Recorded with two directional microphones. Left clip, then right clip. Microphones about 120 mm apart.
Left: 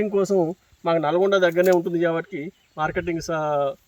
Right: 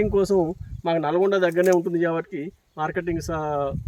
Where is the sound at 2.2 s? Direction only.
Centre (ahead or behind).